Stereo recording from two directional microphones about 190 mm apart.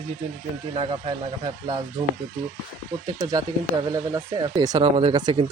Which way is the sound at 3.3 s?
20° right (ahead or behind).